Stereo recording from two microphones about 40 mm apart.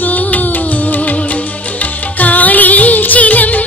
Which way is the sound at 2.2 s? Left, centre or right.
Left.